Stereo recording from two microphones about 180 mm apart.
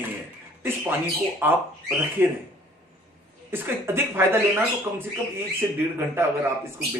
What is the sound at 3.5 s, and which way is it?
Speech, 15° right (ahead or behind).